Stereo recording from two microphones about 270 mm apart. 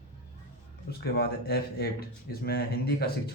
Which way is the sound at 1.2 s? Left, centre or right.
Left.